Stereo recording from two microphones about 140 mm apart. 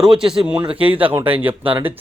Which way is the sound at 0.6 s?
40° right (ahead or behind).